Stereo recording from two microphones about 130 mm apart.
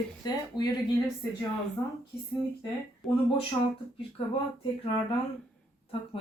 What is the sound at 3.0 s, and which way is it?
Speech, centre (ahead or behind).